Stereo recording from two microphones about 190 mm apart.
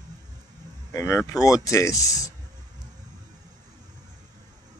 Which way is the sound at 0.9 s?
15° left (ahead or behind).